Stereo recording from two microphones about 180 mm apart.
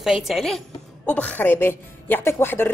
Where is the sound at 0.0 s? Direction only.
Centre (ahead or behind).